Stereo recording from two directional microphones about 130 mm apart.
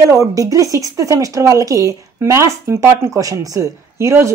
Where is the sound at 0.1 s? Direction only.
25° right (ahead or behind).